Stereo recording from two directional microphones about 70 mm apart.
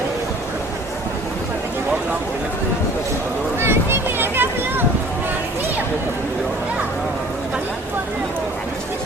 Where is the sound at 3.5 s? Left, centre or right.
Right.